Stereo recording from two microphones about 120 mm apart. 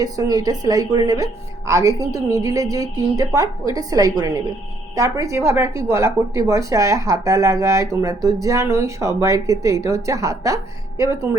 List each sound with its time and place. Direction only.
0.0 s a woman's voice: 30° right (ahead or behind)